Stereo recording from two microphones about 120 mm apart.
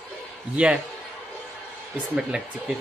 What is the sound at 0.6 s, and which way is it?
Speech, 10° right (ahead or behind).